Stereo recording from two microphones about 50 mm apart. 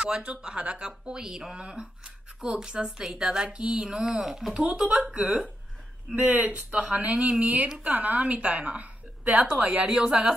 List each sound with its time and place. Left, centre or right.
0.0 s speech: right
4.6 s a woman's voice: centre
9.8 s speech: centre